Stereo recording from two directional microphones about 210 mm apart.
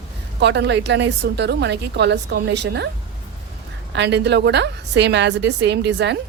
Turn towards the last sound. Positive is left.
turn(degrees=-55)  # may be behind; listen again after turning